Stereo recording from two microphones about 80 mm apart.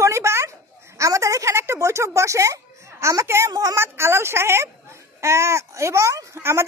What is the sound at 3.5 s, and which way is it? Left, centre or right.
Speech, right.